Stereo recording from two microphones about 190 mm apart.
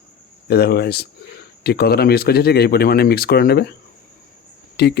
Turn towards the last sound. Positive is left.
turn(degrees=60)  # may be behind; listen again after turning